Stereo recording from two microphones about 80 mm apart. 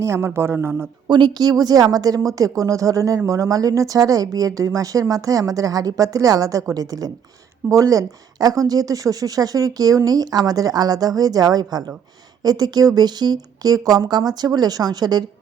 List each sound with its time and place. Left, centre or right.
0.0 s speech: right
1.0 s speech: right